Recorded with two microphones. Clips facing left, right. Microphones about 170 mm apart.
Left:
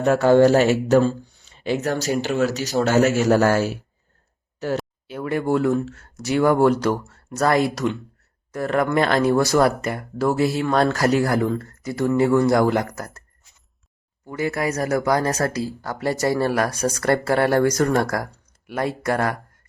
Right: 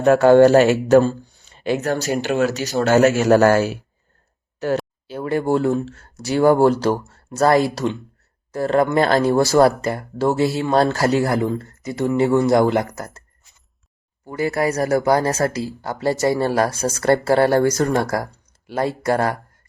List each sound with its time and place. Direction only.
0.0 s speech: 55° right (ahead or behind)
5.0 s speech: 30° right (ahead or behind)
14.3 s speech: 35° right (ahead or behind)